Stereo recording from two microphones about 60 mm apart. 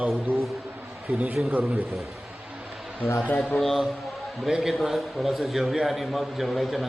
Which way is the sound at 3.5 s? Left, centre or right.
Centre.